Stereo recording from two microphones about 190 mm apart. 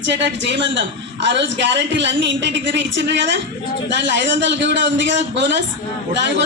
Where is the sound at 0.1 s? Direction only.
70° right (ahead or behind).